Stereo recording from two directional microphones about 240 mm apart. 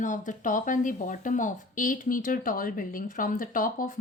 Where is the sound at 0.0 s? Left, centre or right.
Left.